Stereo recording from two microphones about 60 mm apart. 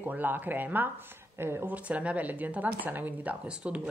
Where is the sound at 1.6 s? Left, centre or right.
Right.